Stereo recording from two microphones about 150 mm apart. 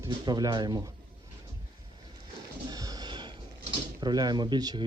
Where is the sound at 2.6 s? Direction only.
25° right (ahead or behind).